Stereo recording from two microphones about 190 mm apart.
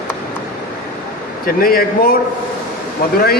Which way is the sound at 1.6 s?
50° left (ahead or behind).